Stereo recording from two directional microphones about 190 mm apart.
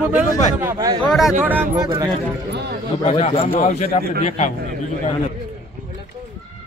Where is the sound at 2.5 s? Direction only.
65° right (ahead or behind).